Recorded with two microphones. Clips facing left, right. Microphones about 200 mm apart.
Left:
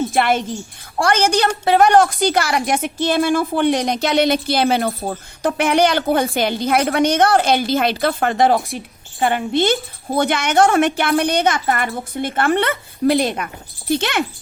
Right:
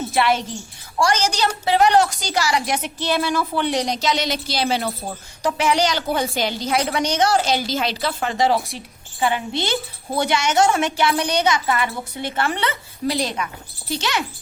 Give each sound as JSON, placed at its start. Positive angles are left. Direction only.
{"t": 0.1, "sound": "a woman's voice", "side_deg": 50}